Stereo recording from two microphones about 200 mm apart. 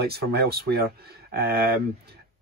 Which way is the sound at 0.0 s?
50° right (ahead or behind).